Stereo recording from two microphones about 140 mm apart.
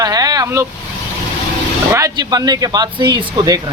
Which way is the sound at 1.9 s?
20° right (ahead or behind).